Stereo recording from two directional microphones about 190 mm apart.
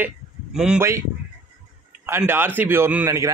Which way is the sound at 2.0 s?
10° right (ahead or behind).